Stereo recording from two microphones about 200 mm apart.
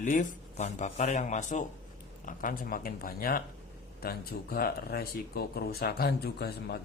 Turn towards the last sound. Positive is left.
turn(degrees=55)  # may be behind; listen again after turning